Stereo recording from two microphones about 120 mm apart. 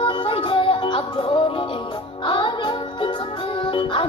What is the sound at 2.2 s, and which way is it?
Music, 40° left (ahead or behind).